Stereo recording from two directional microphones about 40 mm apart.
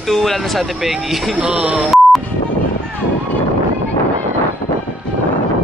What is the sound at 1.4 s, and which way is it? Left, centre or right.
Speech, right.